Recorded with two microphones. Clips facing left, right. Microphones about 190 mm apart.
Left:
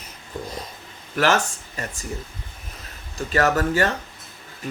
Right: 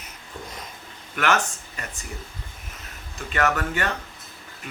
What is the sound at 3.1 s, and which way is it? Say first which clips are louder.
Speech: left 4 dB; 35° left (ahead or behind).